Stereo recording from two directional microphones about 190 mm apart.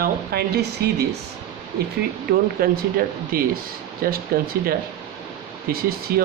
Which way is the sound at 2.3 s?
55° right (ahead or behind).